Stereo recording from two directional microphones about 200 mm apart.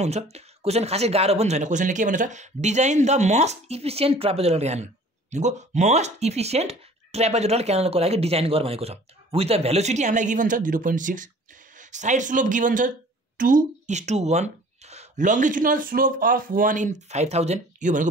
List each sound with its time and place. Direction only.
0.0 s speech: 30° right (ahead or behind)